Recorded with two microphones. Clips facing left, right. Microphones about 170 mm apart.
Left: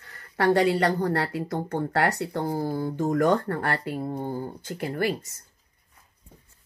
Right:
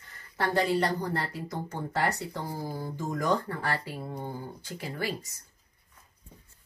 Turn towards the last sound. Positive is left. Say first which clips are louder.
# left 7 dB
turn(degrees=55)  # may be behind; listen again after turning